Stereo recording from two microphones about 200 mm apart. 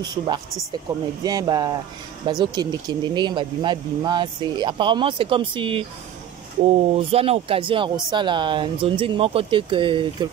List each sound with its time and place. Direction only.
1.2 s speech: 20° right (ahead or behind)